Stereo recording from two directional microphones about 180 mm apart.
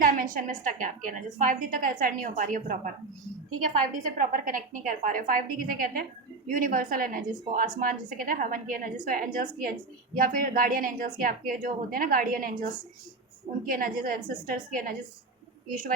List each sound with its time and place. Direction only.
0.0 s a woman's voice: 50° right (ahead or behind)
4.0 s a woman's voice: 50° right (ahead or behind)
13.7 s a woman's voice: 50° right (ahead or behind)